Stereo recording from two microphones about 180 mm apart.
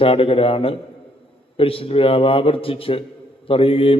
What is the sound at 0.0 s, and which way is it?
A man's voice, 30° left (ahead or behind).